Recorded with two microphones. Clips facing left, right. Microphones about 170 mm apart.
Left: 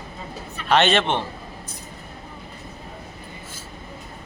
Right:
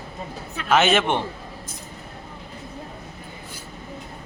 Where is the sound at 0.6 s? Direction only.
5° right (ahead or behind).